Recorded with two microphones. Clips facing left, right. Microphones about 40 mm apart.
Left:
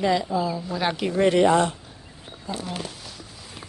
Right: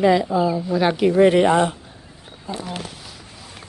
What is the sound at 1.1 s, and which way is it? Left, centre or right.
Speech, centre.